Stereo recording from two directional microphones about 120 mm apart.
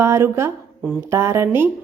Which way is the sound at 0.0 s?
20° right (ahead or behind).